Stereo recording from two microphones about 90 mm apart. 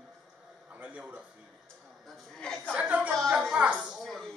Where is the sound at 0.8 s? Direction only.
15° right (ahead or behind).